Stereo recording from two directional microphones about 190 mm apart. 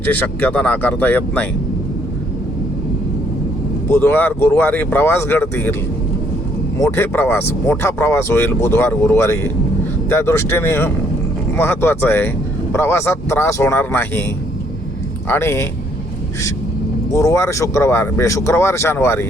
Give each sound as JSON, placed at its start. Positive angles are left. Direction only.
{"t": 0.0, "sound": "speech", "side_deg": 10}
{"t": 3.8, "sound": "speech", "side_deg": 10}
{"t": 6.7, "sound": "speech", "side_deg": 15}
{"t": 15.3, "sound": "speech", "side_deg": 15}
{"t": 17.1, "sound": "speech", "side_deg": 15}